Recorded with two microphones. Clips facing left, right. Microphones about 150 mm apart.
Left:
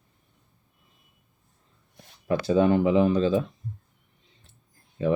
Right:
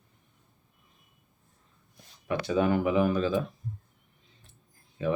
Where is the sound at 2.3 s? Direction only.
30° left (ahead or behind).